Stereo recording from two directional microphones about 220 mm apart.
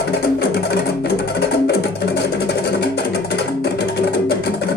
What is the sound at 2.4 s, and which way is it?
Music, 50° left (ahead or behind).